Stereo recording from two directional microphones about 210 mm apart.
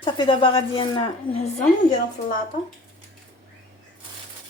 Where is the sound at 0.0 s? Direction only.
25° left (ahead or behind).